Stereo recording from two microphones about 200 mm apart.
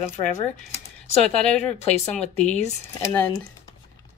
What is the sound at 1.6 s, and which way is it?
Speech, 35° left (ahead or behind).